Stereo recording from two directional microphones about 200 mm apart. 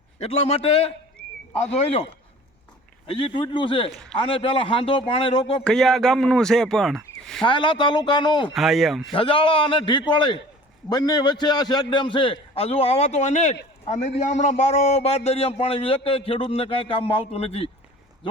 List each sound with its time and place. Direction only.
0.2 s a man's voice: 30° left (ahead or behind)
3.1 s a man's voice: 25° left (ahead or behind)
5.6 s speech: centre (ahead or behind)
7.4 s a man's voice: 25° left (ahead or behind)
8.5 s speech: centre (ahead or behind)
9.1 s a man's voice: 25° left (ahead or behind)